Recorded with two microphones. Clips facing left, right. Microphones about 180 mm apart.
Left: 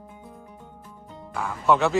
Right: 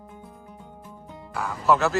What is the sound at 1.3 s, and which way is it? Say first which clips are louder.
Speech: even; centre (ahead or behind).